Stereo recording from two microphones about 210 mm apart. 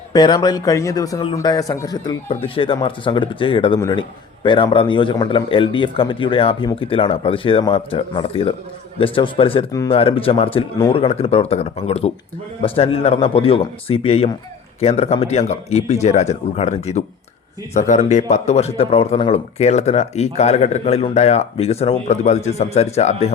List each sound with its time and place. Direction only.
0.1 s a man's voice: 20° left (ahead or behind)